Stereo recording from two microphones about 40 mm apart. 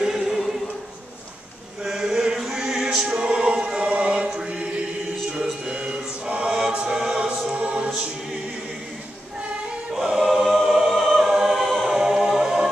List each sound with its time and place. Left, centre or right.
0.0 s choir: centre
1.9 s chant: centre
2.3 s music: centre; by 4.1 s right
5.3 s a sound: centre
5.8 s mantra: right
6.7 s choir: right
10.0 s choir: centre
10.9 s music: centre
11.3 s choir: centre